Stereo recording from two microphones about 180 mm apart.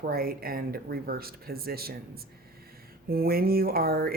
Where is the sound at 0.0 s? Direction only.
55° right (ahead or behind).